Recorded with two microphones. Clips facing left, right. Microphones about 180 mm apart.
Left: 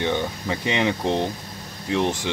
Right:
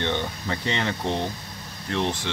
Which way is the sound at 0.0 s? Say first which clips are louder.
Left 3 dB; 10° left (ahead or behind).